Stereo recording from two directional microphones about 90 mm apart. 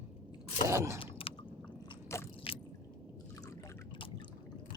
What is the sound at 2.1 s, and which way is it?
Biting, 30° left (ahead or behind).